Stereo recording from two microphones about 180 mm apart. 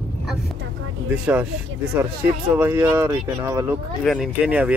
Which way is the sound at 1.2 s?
10° right (ahead or behind).